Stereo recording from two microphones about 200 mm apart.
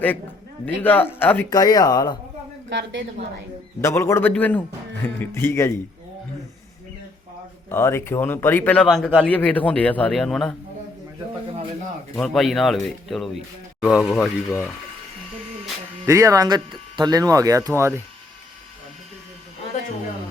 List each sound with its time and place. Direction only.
0.6 s speech: 10° left (ahead or behind)
2.6 s a woman's voice: 65° right (ahead or behind)
3.8 s speech: 15° left (ahead or behind)
7.7 s a man's voice: 10° left (ahead or behind)
12.1 s a man's voice: centre (ahead or behind)
16.0 s speech: 15° right (ahead or behind)